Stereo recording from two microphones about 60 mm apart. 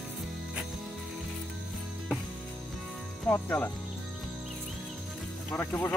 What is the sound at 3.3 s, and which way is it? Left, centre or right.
Speech, left.